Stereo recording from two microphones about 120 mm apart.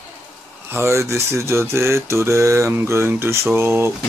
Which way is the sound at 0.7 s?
25° right (ahead or behind).